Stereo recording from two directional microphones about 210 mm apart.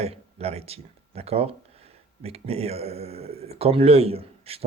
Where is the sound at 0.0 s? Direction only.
30° right (ahead or behind).